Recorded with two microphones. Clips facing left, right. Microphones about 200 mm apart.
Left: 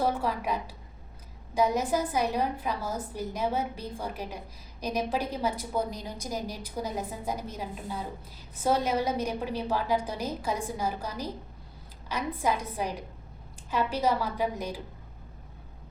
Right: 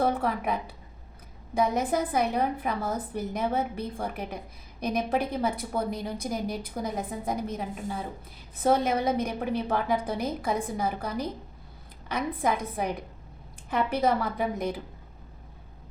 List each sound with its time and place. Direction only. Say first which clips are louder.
0.0 s a woman's voice: right 2 dB; 60° right (ahead or behind)
8.6 s a woman's voice: right 3 dB; 55° right (ahead or behind)